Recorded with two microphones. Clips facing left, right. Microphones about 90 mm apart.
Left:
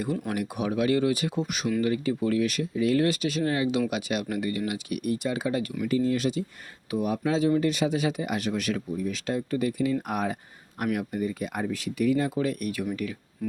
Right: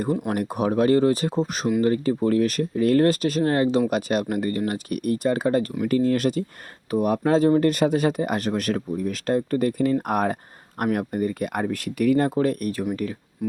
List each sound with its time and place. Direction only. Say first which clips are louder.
0.3 s speech: right 6 dB; 40° right (ahead or behind)
13.4 s music: right 5 dB; 20° right (ahead or behind)